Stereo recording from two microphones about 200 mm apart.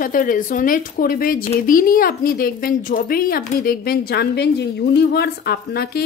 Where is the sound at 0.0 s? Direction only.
45° left (ahead or behind).